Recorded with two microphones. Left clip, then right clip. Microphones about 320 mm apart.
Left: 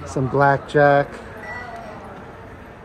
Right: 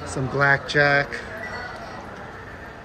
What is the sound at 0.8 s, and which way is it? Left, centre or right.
Speech, left.